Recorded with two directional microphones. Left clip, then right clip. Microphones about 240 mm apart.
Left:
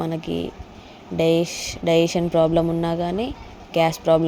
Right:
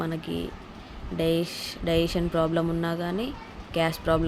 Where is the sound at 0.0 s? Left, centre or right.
Centre.